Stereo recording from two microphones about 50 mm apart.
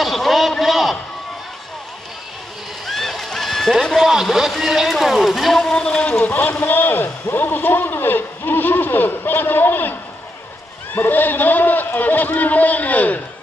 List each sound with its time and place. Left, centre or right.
0.0 s a sound: centre
2.9 s goose: centre
3.8 s speech: centre
4.1 s speech: centre
5.7 s speech: centre
6.2 s a man's voice: left
11.0 s a man's voice: left